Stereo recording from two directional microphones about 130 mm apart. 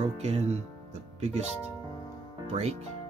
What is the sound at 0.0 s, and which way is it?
Speech, 55° right (ahead or behind).